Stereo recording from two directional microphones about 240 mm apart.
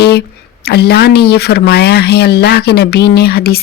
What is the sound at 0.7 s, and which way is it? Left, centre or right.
Speech, left.